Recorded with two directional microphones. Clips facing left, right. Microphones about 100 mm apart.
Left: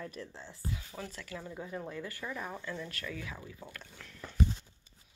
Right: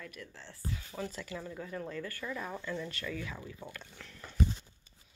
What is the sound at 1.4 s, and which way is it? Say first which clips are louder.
Speech: left 2 dB; 10° left (ahead or behind).